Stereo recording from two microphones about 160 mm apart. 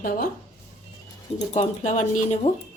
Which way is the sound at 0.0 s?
65° left (ahead or behind).